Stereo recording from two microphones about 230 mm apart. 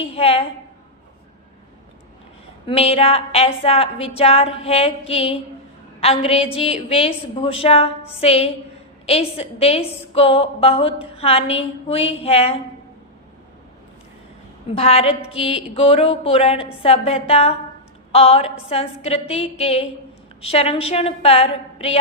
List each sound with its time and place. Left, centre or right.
0.0 s speech: left
2.6 s speech: left
14.8 s speech: left